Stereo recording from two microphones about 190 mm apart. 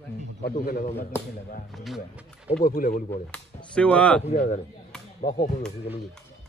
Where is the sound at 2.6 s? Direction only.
50° left (ahead or behind).